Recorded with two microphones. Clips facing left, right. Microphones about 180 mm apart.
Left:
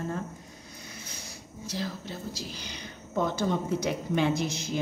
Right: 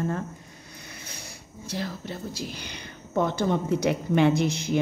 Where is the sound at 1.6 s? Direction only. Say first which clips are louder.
Right 2 dB; 60° right (ahead or behind).